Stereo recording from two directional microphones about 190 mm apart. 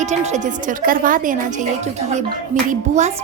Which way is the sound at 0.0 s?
40° right (ahead or behind).